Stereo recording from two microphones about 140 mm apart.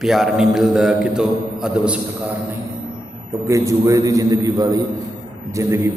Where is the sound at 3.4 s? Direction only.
20° right (ahead or behind).